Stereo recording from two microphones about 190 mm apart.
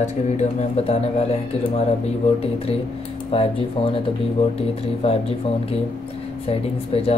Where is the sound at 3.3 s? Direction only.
30° left (ahead or behind).